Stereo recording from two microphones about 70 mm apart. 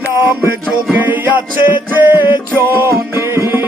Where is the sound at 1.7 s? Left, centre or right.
Right.